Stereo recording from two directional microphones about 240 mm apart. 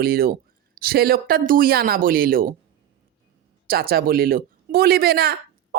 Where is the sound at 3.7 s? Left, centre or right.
Right.